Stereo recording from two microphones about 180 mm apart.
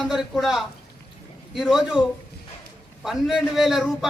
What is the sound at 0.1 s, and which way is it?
A man's voice, centre (ahead or behind).